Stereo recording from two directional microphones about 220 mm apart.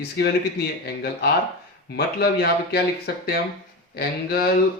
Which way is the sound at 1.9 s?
45° left (ahead or behind).